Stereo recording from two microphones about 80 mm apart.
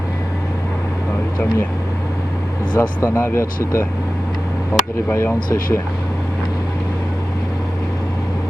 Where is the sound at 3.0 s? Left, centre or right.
Left.